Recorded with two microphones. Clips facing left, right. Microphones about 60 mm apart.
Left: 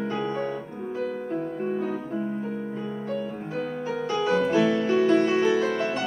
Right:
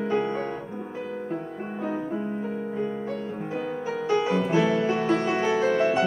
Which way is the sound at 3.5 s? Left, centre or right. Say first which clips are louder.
Even; centre.